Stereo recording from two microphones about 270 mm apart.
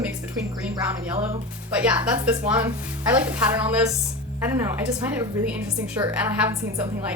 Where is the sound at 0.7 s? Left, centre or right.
Right.